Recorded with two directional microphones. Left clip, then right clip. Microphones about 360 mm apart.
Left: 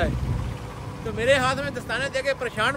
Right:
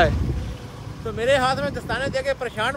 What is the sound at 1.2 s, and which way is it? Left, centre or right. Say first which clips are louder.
Speech: right 1 dB; centre.